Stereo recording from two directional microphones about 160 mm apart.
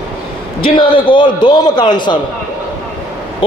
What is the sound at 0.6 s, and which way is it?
A man's voice, 35° left (ahead or behind).